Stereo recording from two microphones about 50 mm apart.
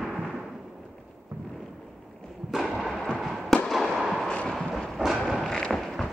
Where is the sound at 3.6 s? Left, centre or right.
Centre.